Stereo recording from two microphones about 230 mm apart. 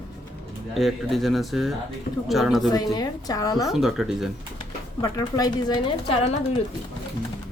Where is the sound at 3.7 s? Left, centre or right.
Centre.